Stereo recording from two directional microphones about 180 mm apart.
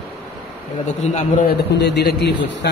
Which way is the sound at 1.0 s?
40° left (ahead or behind).